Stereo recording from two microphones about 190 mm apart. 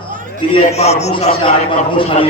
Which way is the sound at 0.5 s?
35° left (ahead or behind).